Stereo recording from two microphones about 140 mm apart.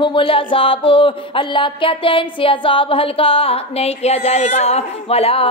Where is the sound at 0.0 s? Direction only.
35° left (ahead or behind).